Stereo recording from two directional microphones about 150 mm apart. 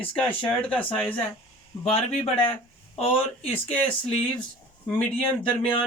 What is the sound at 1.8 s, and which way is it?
Speech, 40° left (ahead or behind).